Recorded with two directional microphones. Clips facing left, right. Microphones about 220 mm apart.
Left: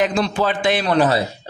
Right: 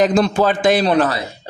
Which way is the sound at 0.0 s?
45° right (ahead or behind).